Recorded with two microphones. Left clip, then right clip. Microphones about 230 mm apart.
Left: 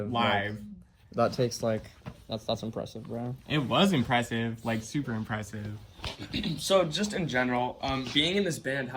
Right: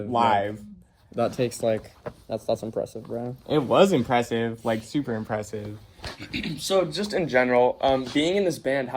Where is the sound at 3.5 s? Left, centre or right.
Right.